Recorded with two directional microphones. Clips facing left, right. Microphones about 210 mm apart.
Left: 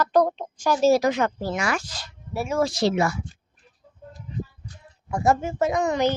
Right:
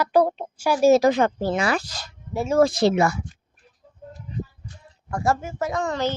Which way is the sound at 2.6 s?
55° right (ahead or behind).